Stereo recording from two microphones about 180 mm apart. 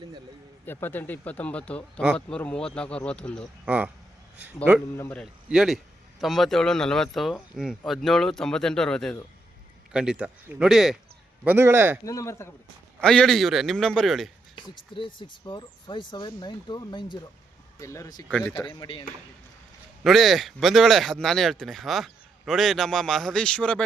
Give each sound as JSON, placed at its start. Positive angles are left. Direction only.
{"t": 0.6, "sound": "speech", "side_deg": 10}
{"t": 3.7, "sound": "a man's voice", "side_deg": -10}
{"t": 4.9, "sound": "speech", "side_deg": 10}
{"t": 5.2, "sound": "a man's voice", "side_deg": 0}
{"t": 11.4, "sound": "a man's voice", "side_deg": -15}
{"t": 12.0, "sound": "speech", "side_deg": 15}
{"t": 13.0, "sound": "a man's voice", "side_deg": 5}
{"t": 14.5, "sound": "speech", "side_deg": 30}
{"t": 18.3, "sound": "a man's voice", "side_deg": 5}
{"t": 18.7, "sound": "speech", "side_deg": 25}
{"t": 20.1, "sound": "a man's voice", "side_deg": 0}